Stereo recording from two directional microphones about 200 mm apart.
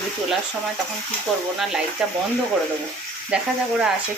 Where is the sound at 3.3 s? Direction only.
5° right (ahead or behind).